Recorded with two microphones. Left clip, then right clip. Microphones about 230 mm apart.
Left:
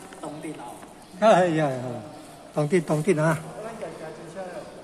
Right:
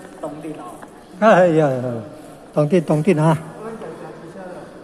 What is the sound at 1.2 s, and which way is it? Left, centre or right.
Speech, centre.